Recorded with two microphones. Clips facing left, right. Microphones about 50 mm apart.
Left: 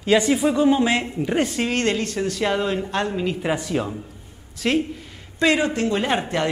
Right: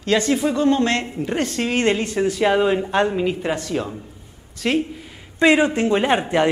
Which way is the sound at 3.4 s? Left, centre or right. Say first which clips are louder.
Even; centre.